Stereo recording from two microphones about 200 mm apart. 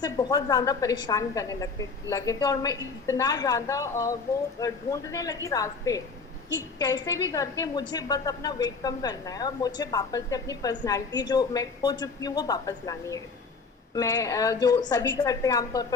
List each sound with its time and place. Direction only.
0.0 s a woman's voice: 20° left (ahead or behind)